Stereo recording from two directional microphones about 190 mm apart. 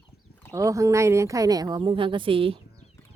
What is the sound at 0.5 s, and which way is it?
Speech, 15° right (ahead or behind).